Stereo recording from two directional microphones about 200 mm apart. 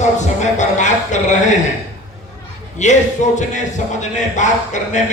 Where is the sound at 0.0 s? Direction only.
35° left (ahead or behind).